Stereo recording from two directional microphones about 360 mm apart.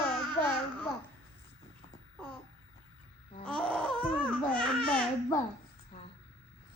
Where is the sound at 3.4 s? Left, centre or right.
Centre.